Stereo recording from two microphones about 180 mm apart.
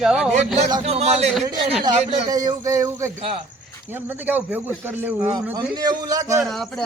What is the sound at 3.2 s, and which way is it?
Speech, 30° right (ahead or behind).